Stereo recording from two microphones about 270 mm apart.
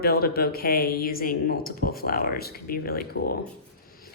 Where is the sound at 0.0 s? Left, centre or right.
Left.